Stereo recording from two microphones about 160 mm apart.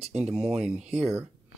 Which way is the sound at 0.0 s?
40° right (ahead or behind).